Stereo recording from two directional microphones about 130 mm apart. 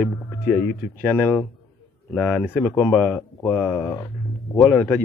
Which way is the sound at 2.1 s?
Centre (ahead or behind).